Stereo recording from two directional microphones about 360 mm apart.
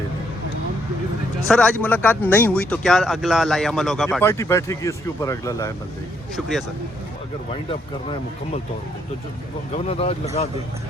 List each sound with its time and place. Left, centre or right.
1.5 s speech: centre
9.7 s speech: centre